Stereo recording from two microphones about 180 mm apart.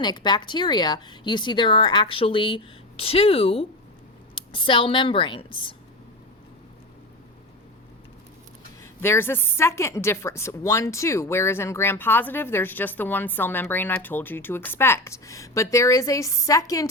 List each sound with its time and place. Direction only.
0.0 s speech: 25° left (ahead or behind)
8.8 s a woman's voice: 15° left (ahead or behind)